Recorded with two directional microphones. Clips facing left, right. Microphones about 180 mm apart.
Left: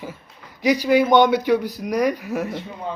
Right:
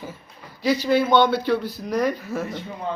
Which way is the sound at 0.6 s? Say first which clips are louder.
Left 3 dB; 15° left (ahead or behind).